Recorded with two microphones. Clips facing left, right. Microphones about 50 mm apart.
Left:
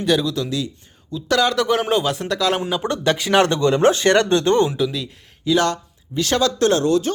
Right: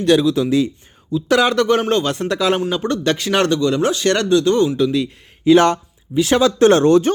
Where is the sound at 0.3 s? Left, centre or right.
Centre.